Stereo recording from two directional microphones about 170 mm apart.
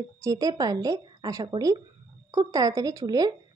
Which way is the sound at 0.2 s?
20° right (ahead or behind).